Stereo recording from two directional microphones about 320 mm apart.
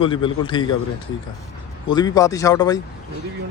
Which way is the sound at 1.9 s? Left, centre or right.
Centre.